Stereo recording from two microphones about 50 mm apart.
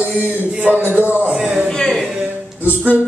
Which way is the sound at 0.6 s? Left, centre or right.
Right.